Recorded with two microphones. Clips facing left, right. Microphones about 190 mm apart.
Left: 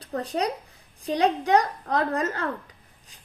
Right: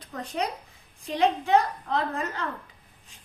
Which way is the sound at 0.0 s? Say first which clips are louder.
Left 4 dB; 35° left (ahead or behind).